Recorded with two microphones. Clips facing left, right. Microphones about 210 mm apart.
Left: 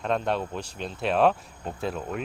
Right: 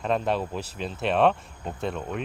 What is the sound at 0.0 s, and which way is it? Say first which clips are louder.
Speech: right 1 dB; centre (ahead or behind).